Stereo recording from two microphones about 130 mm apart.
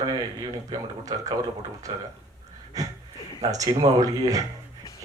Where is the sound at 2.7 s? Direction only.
25° right (ahead or behind).